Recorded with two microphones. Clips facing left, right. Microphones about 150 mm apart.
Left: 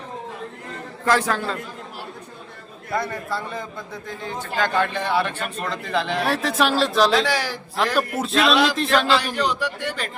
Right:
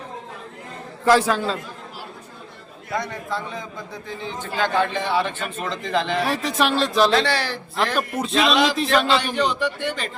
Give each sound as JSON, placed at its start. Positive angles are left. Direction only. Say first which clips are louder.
{"t": 1.0, "sound": "speech", "louder": "right 3 dB", "side_deg": -15}
{"t": 2.9, "sound": "a man's voice", "louder": "left 1 dB", "side_deg": 5}
{"t": 4.5, "sound": "speech", "louder": "right 1 dB", "side_deg": -10}
{"t": 5.2, "sound": "a man's voice", "louder": "even", "side_deg": 5}